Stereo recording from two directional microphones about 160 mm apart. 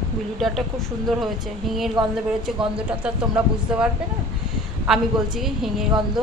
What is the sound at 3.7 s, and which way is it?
Speech, 5° right (ahead or behind).